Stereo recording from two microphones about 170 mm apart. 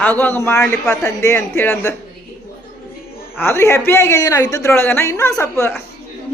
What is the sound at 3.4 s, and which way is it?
A woman's voice, 15° left (ahead or behind).